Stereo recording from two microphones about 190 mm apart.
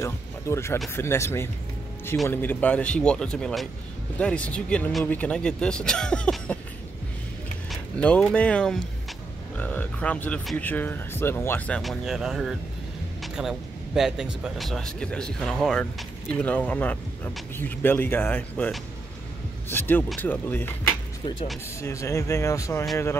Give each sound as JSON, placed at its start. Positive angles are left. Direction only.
{"t": 0.0, "sound": "music", "side_deg": 15}
{"t": 0.9, "sound": "speech", "side_deg": 15}
{"t": 8.0, "sound": "speech", "side_deg": 5}
{"t": 19.7, "sound": "speech", "side_deg": 10}
{"t": 21.8, "sound": "speech", "side_deg": 15}